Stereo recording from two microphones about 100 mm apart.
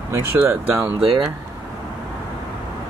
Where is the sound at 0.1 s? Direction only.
25° right (ahead or behind).